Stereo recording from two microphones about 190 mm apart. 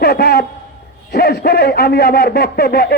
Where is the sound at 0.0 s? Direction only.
60° left (ahead or behind).